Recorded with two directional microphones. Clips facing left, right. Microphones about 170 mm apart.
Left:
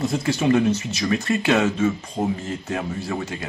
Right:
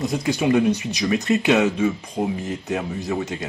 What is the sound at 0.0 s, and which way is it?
Speech, 15° right (ahead or behind).